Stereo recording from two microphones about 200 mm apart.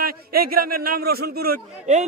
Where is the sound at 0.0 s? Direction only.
50° right (ahead or behind).